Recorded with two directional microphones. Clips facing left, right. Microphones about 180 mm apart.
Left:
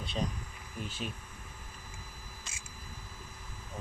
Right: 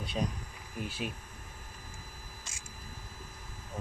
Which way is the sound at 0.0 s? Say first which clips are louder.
Right 1 dB; 10° right (ahead or behind).